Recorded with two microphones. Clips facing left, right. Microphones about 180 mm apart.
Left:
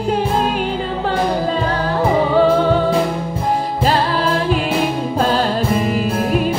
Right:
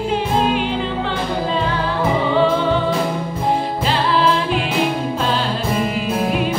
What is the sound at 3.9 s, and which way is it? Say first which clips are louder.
Music: right 1 dB; 45° left (ahead or behind).